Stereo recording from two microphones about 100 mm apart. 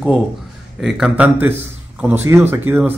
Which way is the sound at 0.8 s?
5° right (ahead or behind).